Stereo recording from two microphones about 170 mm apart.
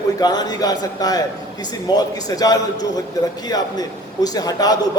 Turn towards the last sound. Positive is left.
turn(degrees=20)  # may be behind; listen again after turning